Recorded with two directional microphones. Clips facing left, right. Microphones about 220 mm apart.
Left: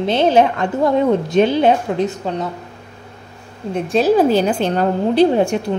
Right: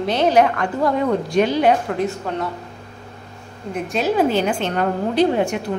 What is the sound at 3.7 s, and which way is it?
A woman's voice, 35° left (ahead or behind).